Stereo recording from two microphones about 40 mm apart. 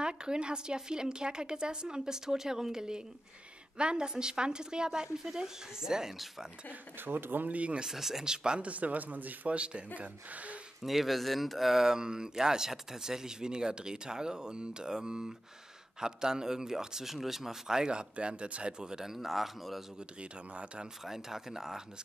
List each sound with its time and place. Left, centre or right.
0.0 s a woman's voice: right
7.1 s speech: right
7.5 s speech: right
7.8 s speech: centre
8.5 s speech: right
9.5 s a woman's voice: right
10.8 s speech: centre
11.8 s speech: centre
18.1 s a woman's voice: right
19.1 s speech: centre
20.2 s a woman's voice: right
21.0 s speech: centre